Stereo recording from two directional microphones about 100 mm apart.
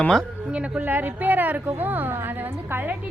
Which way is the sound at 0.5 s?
10° right (ahead or behind).